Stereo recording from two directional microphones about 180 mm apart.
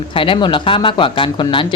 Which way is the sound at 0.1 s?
30° left (ahead or behind).